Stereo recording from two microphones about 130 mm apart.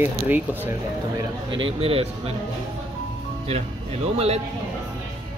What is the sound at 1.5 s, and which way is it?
Speech, 45° right (ahead or behind).